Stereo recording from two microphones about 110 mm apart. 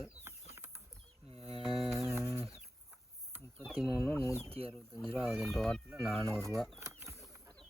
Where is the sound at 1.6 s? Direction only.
Centre (ahead or behind).